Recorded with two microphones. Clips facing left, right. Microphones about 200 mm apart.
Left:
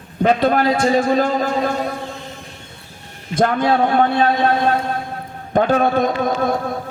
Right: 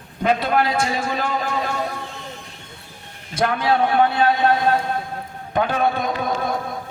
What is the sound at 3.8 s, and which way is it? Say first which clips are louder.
Speech: left 2 dB; 45° left (ahead or behind).